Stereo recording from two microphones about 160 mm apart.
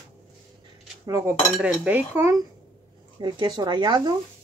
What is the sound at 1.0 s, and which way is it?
Cutlery, 20° right (ahead or behind).